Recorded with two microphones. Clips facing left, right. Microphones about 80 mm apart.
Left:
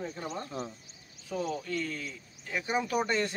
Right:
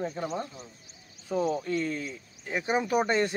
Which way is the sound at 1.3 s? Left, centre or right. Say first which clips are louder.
Right 6 dB; right.